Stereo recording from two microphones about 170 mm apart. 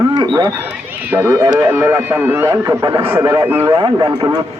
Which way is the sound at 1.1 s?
15° right (ahead or behind).